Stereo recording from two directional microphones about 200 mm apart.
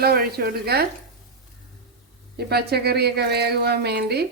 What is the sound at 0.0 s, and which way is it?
Speech, 50° right (ahead or behind).